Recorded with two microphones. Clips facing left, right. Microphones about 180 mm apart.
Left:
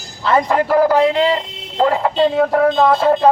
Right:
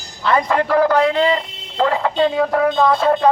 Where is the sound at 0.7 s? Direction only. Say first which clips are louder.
Left 2 dB; 15° left (ahead or behind).